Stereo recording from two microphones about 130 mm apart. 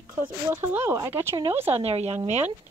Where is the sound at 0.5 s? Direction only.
20° right (ahead or behind).